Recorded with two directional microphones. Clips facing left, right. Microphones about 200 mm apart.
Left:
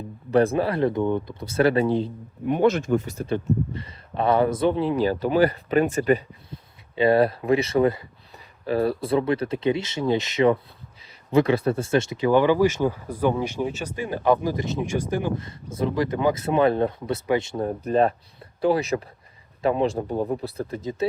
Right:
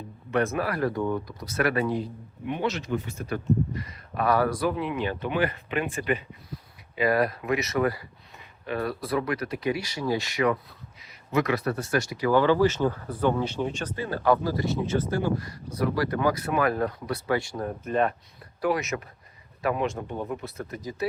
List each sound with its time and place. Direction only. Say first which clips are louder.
0.3 s speech: left 6 dB; 30° left (ahead or behind)
2.5 s speech: left 8 dB; 50° left (ahead or behind)
3.2 s speech: left 2 dB; 30° left (ahead or behind)
6.5 s speech: left 2 dB; 30° left (ahead or behind)